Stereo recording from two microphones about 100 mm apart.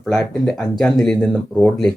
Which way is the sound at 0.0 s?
5° left (ahead or behind).